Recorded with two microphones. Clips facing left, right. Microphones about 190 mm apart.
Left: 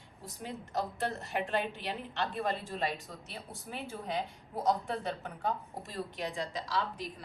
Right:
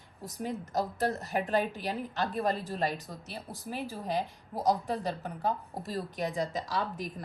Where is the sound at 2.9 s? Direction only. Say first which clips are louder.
Right 3 dB; centre (ahead or behind).